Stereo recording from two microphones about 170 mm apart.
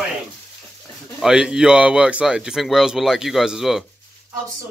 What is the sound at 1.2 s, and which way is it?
Speech, 5° right (ahead or behind).